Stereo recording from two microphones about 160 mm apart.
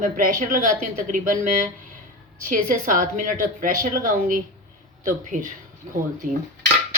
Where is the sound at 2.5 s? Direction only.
55° right (ahead or behind).